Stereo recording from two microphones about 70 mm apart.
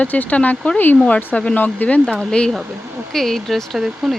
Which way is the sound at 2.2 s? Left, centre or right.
Centre.